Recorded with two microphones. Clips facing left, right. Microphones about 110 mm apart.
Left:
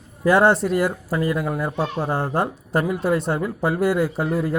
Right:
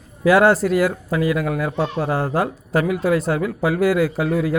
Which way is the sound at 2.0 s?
20° left (ahead or behind).